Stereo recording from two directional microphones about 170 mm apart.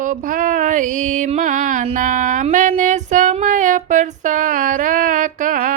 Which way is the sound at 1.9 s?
50° right (ahead or behind).